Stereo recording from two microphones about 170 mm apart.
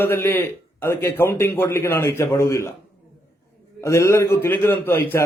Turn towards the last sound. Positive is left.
turn(degrees=15)  # may be behind; listen again after turning